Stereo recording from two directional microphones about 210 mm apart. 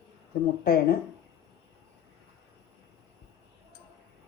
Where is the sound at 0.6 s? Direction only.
45° left (ahead or behind).